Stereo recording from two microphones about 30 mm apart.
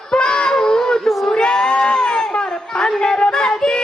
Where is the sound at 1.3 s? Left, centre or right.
Left.